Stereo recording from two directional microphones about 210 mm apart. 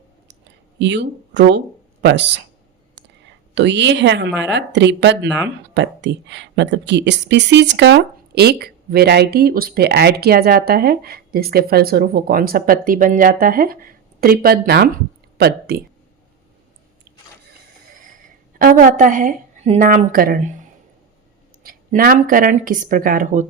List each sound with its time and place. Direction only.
0.3 s a sound: 55° right (ahead or behind)
3.5 s speech: 55° right (ahead or behind)
18.6 s a woman's voice: 40° right (ahead or behind)